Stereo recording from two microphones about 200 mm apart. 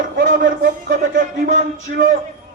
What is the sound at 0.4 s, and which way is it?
A man's voice, 50° right (ahead or behind).